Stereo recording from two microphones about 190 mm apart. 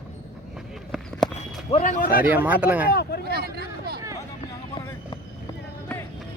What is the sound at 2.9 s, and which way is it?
Speech, 55° left (ahead or behind).